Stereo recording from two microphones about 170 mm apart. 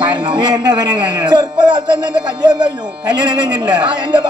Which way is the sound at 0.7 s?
25° right (ahead or behind).